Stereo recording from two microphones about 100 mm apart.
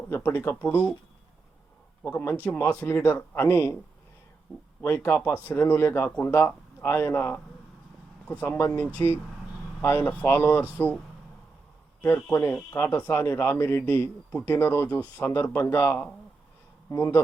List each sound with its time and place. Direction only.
0.1 s speech: 20° left (ahead or behind)
2.0 s speech: 20° left (ahead or behind)
4.8 s speech: 20° left (ahead or behind)
12.0 s speech: 25° left (ahead or behind)